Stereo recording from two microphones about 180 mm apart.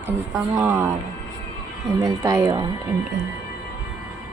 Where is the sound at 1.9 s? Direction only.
20° right (ahead or behind).